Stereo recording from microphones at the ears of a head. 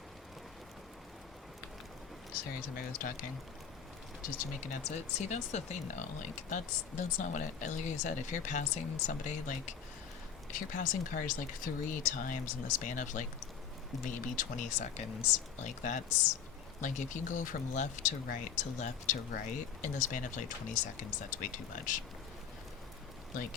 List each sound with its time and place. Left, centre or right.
2.3 s speech: left